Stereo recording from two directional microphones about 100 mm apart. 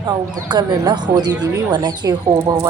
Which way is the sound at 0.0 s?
50° right (ahead or behind).